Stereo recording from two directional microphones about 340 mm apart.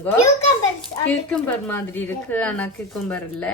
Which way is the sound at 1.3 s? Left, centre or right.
Centre.